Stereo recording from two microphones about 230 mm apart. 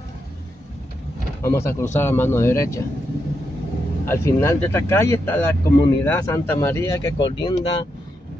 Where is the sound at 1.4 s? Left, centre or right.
Centre.